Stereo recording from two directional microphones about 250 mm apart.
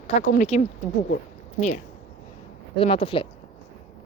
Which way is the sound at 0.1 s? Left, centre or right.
Left.